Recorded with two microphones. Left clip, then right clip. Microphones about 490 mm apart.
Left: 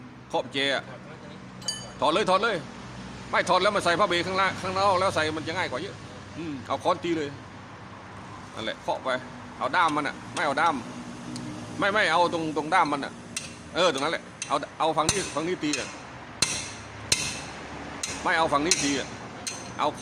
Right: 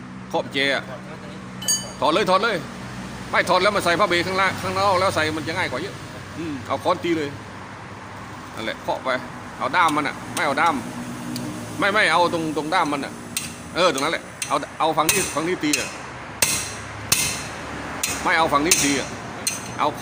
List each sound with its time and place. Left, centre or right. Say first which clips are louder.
0.3 s speech: right 5 dB; left
2.0 s speech: right 4 dB; left
8.6 s speech: right 4 dB; left
18.3 s speech: right 5 dB; left